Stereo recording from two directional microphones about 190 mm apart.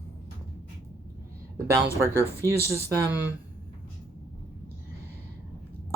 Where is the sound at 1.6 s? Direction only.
15° right (ahead or behind).